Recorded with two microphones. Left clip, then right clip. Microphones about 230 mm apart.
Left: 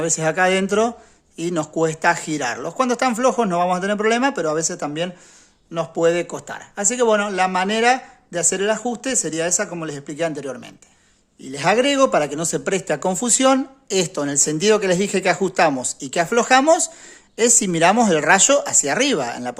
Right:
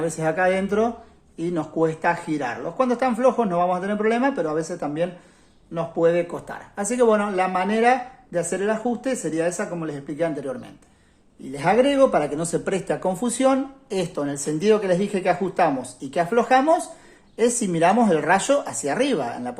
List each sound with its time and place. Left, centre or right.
0.0 s speech: left